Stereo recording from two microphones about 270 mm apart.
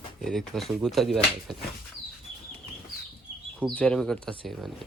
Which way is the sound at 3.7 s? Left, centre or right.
Centre.